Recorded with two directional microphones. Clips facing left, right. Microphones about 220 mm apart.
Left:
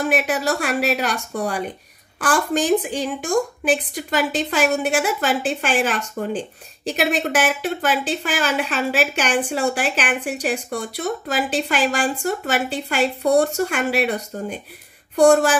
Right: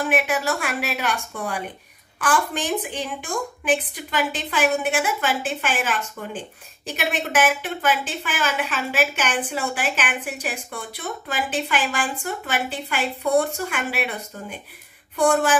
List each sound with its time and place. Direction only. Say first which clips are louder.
0.1 s a woman's voice: left 2 dB; 35° left (ahead or behind)